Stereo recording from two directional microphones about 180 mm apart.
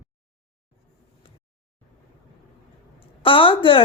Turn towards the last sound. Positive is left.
turn(degrees=30)  # may be behind; listen again after turning